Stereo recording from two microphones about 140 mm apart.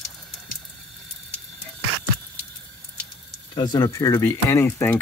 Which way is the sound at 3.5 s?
30° left (ahead or behind).